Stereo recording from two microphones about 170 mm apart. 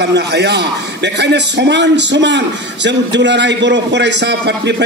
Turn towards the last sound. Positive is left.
turn(degrees=-85)